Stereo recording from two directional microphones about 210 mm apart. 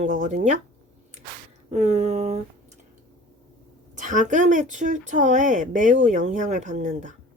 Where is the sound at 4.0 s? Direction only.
35° right (ahead or behind).